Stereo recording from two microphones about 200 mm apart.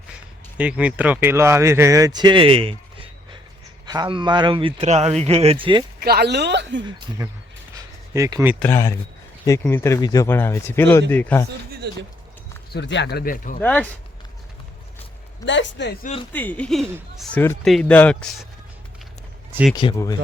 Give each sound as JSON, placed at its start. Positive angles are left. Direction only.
{"t": 0.5, "sound": "speech", "side_deg": -5}
{"t": 6.0, "sound": "speech", "side_deg": -50}
{"t": 8.1, "sound": "speech", "side_deg": -15}
{"t": 8.5, "sound": "speech", "side_deg": 10}
{"t": 11.8, "sound": "speech", "side_deg": -55}
{"t": 12.7, "sound": "speech", "side_deg": 55}
{"t": 13.6, "sound": "speech", "side_deg": 10}
{"t": 15.4, "sound": "a man's voice", "side_deg": 65}
{"t": 16.3, "sound": "speech", "side_deg": 10}
{"t": 19.7, "sound": "speech", "side_deg": 20}